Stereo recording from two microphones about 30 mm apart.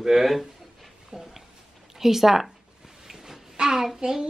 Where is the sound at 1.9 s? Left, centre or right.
Centre.